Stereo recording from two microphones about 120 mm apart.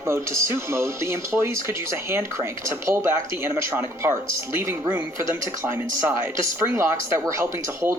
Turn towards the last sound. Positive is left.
turn(degrees=-25)  # may be behind; listen again after turning